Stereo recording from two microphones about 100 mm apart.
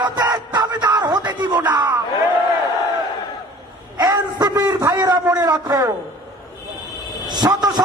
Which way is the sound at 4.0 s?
45° right (ahead or behind).